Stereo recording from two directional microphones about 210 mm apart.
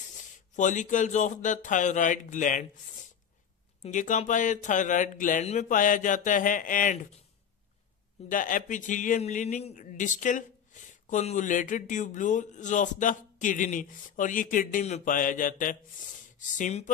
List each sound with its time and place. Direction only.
0.6 s speech: 35° left (ahead or behind)
3.8 s speech: 35° left (ahead or behind)
8.3 s speech: 40° left (ahead or behind)